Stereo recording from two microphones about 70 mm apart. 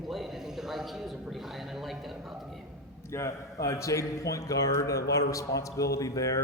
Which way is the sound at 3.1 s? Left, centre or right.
Left.